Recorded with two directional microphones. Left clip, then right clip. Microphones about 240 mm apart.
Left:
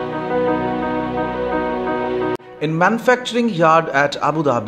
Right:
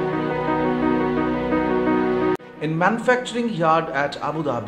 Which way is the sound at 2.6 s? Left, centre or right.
Left.